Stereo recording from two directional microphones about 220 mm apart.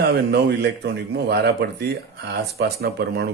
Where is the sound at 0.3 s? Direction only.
50° right (ahead or behind).